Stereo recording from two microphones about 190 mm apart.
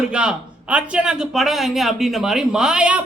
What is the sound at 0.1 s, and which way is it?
Speech, 5° right (ahead or behind).